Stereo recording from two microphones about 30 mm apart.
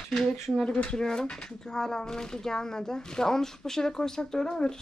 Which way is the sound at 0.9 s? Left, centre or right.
Left.